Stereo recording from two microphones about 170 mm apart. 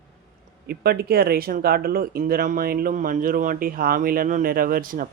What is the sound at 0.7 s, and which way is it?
Speech, 65° right (ahead or behind).